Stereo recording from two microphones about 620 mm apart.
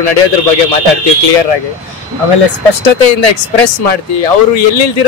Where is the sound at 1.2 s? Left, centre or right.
Left.